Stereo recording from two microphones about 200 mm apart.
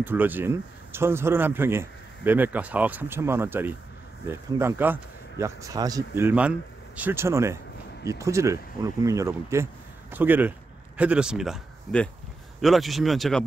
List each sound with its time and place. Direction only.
0.0 s speech: 10° right (ahead or behind)